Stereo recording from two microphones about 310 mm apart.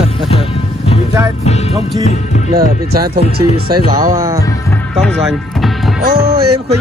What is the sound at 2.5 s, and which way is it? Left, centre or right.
Speech, right.